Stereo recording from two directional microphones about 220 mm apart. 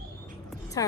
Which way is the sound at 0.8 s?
15° left (ahead or behind).